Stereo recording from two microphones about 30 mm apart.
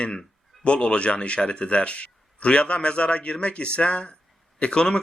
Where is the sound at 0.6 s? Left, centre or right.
Left.